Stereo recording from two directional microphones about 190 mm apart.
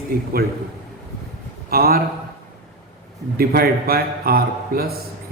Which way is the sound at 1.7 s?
50° right (ahead or behind).